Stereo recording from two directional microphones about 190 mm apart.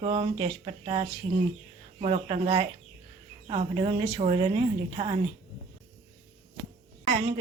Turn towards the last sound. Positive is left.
turn(degrees=-30)  # may be behind; listen again after turning